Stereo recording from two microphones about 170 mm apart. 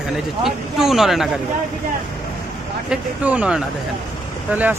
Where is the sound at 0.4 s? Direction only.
Centre (ahead or behind).